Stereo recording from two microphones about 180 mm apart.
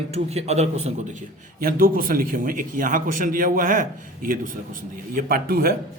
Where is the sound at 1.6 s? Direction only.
50° right (ahead or behind).